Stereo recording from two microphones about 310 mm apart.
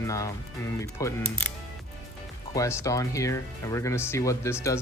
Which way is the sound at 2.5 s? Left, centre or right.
Centre.